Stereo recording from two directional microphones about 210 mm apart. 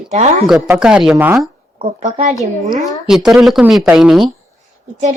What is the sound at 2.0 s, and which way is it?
Speech, 35° right (ahead or behind).